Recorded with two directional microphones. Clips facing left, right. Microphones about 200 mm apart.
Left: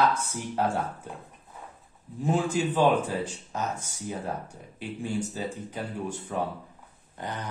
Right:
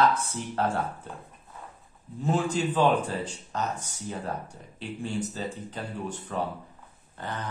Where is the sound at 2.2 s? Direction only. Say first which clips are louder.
Left 1 dB; 10° left (ahead or behind).